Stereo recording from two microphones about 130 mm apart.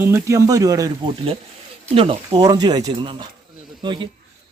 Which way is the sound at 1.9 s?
50° right (ahead or behind).